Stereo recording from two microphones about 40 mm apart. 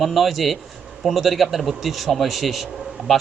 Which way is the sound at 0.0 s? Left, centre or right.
Centre.